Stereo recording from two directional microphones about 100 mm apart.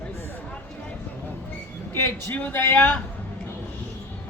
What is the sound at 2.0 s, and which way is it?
Speech, 20° left (ahead or behind).